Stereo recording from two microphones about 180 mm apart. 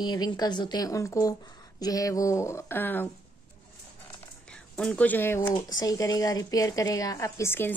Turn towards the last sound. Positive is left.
turn(degrees=10)  # may be behind; listen again after turning